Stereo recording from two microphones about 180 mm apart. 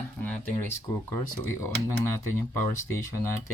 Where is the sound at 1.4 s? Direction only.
15° left (ahead or behind).